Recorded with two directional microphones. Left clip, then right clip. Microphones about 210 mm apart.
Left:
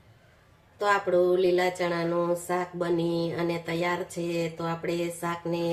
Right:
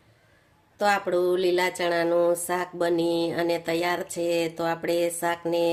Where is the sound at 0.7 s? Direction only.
55° right (ahead or behind).